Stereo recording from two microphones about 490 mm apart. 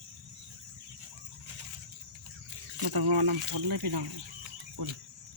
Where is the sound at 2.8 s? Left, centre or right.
Right.